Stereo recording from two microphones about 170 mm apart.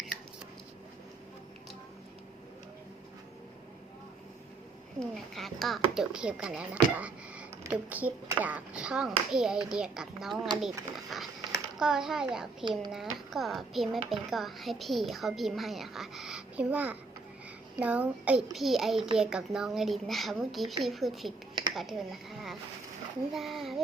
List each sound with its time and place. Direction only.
4.9 s a child's voice: centre (ahead or behind)